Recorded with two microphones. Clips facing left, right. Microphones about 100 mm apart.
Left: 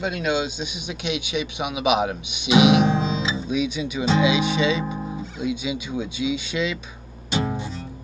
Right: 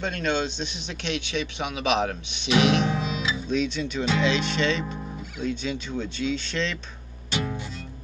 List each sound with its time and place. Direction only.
0.0 s speech: 10° left (ahead or behind)
2.9 s music: 25° left (ahead or behind)
3.4 s speech: 10° left (ahead or behind)
7.2 s music: 20° left (ahead or behind)